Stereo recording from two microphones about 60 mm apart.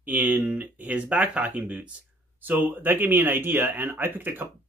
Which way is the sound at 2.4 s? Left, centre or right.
Right.